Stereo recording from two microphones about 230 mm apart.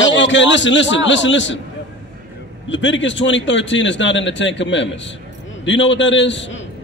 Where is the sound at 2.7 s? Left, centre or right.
Left.